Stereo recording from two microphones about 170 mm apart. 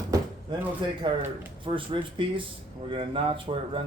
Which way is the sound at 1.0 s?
30° right (ahead or behind).